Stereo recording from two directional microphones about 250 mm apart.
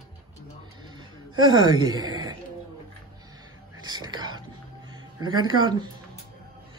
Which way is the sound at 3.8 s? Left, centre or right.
Centre.